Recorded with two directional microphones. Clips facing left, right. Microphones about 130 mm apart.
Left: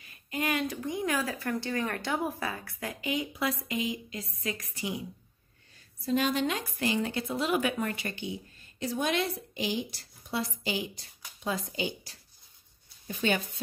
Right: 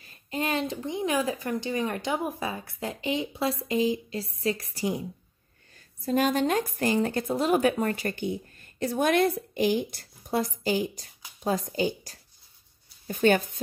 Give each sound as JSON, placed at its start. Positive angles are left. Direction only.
{"t": 0.0, "sound": "speech", "side_deg": -30}
{"t": 6.0, "sound": "speech", "side_deg": -45}